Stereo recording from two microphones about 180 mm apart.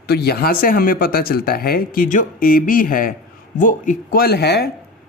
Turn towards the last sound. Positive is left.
turn(degrees=65)  # may be behind; listen again after turning